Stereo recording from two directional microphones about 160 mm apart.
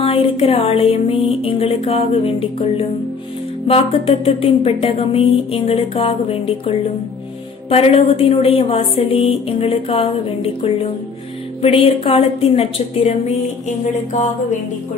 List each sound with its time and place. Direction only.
0.0 s music: 35° left (ahead or behind)
7.7 s music: 40° left (ahead or behind)